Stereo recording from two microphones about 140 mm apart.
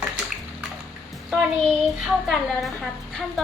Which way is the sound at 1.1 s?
5° right (ahead or behind).